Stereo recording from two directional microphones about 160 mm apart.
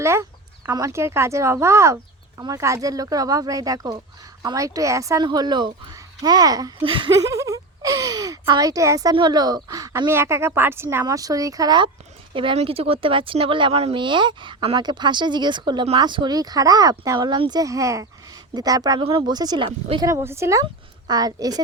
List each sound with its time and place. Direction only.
0.0 s speech: 15° right (ahead or behind)
6.8 s a sound: 30° right (ahead or behind)
7.3 s speech: 20° right (ahead or behind)
20.1 s speech: 20° right (ahead or behind)